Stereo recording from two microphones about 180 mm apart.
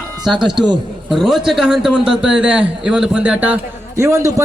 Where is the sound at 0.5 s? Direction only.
25° right (ahead or behind).